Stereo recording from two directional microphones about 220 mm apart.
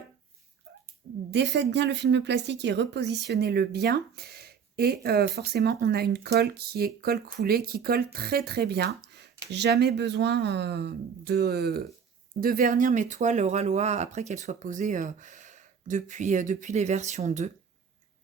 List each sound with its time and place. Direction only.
1.3 s a woman's voice: 50° right (ahead or behind); by 17.5 s 30° right (ahead or behind)